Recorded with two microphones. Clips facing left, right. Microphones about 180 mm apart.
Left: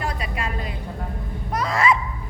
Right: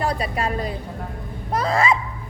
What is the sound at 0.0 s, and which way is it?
A woman's voice, 35° right (ahead or behind).